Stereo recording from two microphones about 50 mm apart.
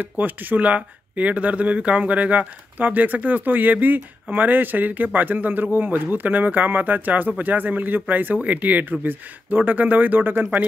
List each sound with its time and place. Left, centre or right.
0.0 s speech: right